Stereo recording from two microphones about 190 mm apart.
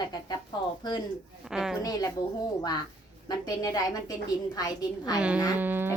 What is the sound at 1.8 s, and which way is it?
Speech, 20° left (ahead or behind).